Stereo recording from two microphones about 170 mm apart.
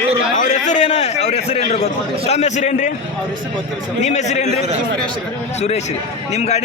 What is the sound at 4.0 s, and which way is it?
Speech, 45° left (ahead or behind).